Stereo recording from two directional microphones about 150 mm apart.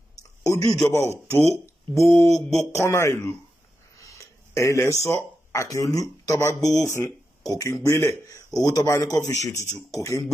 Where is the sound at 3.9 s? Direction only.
20° left (ahead or behind).